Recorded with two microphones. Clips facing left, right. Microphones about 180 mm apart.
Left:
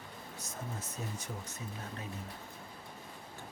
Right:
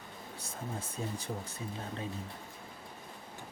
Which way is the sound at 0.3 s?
30° right (ahead or behind).